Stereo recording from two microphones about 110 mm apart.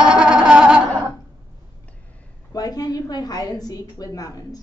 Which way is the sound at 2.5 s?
35° left (ahead or behind).